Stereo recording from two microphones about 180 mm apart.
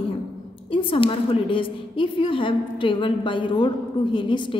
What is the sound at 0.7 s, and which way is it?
A man's voice, 30° left (ahead or behind).